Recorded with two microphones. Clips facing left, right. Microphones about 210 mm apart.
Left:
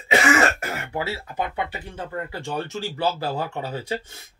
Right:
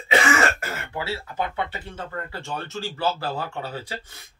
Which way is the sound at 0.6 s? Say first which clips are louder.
Left 2 dB; 15° left (ahead or behind).